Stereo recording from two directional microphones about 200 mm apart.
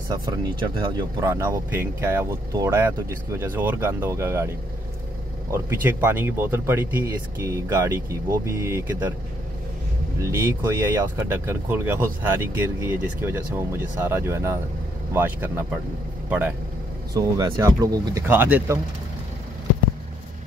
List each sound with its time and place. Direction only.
0.1 s speech: 20° right (ahead or behind)
5.5 s speech: 10° right (ahead or behind)
10.2 s speech: 15° right (ahead or behind)